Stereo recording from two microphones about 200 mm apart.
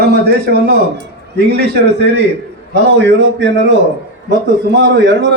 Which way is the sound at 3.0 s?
60° right (ahead or behind).